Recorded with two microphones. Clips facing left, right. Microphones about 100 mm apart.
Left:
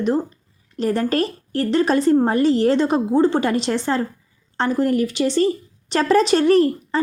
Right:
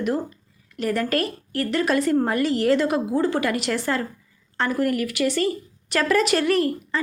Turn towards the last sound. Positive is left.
turn(degrees=35)  # may be behind; listen again after turning